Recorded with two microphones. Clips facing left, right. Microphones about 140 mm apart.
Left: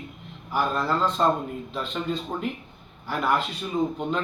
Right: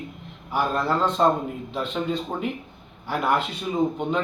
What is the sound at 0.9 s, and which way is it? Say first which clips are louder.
A man's voice: right 2 dB; 20° right (ahead or behind).